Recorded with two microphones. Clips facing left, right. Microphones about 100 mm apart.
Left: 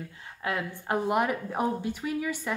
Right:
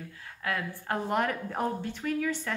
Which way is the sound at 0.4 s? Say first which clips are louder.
Left 2 dB; 20° left (ahead or behind).